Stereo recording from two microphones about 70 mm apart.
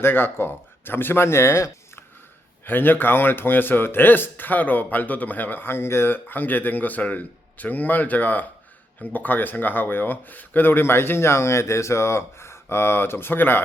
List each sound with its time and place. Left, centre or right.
0.0 s speech: left
2.6 s speech: left